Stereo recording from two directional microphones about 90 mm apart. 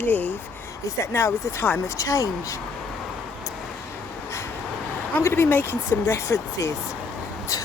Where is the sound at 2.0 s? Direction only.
40° left (ahead or behind).